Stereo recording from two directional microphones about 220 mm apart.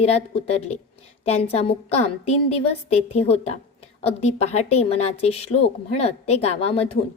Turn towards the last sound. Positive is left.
turn(degrees=25)  # may be behind; listen again after turning